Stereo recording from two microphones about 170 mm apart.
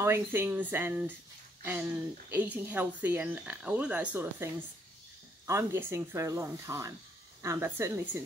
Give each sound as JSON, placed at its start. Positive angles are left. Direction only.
{"t": 0.0, "sound": "speech", "side_deg": -15}
{"t": 5.5, "sound": "speech", "side_deg": -15}